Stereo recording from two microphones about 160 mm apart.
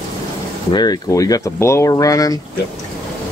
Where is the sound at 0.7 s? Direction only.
25° left (ahead or behind).